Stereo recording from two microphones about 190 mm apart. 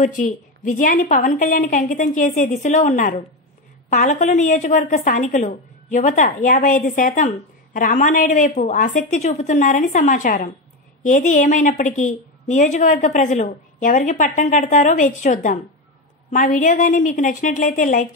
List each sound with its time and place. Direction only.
0.0 s a woman's voice: 40° left (ahead or behind)